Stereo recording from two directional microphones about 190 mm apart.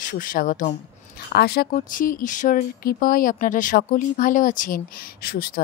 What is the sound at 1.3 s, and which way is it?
Speech, 55° left (ahead or behind).